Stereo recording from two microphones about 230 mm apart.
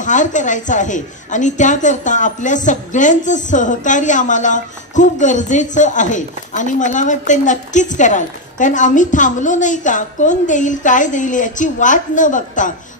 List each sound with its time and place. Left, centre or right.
0.0 s a woman's voice: left